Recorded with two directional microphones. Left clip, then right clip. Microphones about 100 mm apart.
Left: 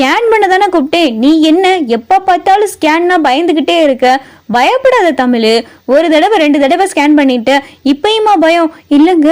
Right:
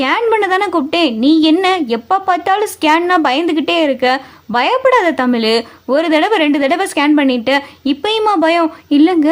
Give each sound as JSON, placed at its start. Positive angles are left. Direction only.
{"t": 0.0, "sound": "a sound", "side_deg": 50}
{"t": 0.3, "sound": "a woman's voice", "side_deg": 35}
{"t": 4.5, "sound": "a woman's voice", "side_deg": 40}